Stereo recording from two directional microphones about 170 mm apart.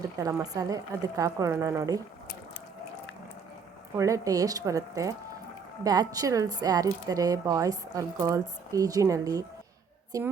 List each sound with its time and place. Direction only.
0.2 s a woman's voice: 20° right (ahead or behind)
3.9 s a woman's voice: 20° right (ahead or behind)